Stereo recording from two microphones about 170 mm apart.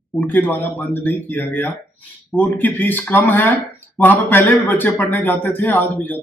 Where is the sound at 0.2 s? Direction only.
10° left (ahead or behind).